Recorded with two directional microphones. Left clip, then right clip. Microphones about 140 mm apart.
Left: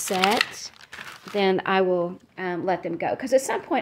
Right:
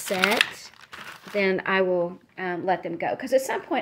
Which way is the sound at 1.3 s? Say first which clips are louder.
Left 1 dB; 20° left (ahead or behind).